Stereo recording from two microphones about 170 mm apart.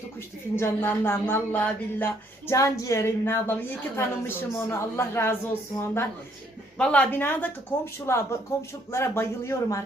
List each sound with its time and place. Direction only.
0.5 s a woman's voice: 15° left (ahead or behind)